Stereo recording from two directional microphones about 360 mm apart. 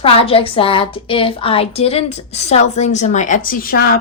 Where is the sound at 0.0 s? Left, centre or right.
Centre.